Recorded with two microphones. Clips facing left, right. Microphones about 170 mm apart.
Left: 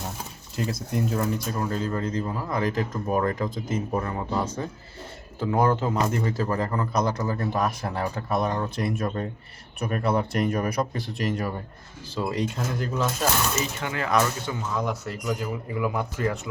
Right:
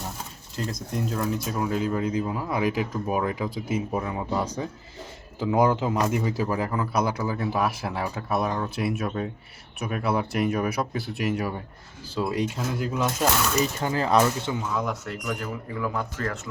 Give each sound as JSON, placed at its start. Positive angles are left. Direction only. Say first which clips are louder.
{"t": 0.5, "sound": "speech", "louder": "left 2 dB", "side_deg": 5}
{"t": 1.5, "sound": "speech", "louder": "right 2 dB", "side_deg": -10}
{"t": 13.6, "sound": "speech", "louder": "right 4 dB", "side_deg": -35}
{"t": 14.7, "sound": "speech", "louder": "even", "side_deg": 0}